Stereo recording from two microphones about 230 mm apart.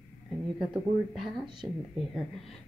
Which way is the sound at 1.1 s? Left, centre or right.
Centre.